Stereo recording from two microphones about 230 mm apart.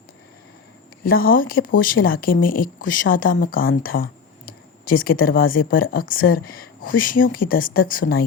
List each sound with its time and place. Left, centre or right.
1.0 s speech: left